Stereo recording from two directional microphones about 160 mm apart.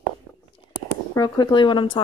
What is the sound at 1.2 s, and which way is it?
Speech, 25° left (ahead or behind).